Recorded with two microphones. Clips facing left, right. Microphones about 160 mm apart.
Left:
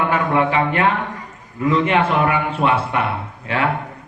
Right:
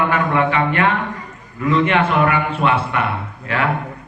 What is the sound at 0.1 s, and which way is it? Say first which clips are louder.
A man's voice: even; 30° left (ahead or behind).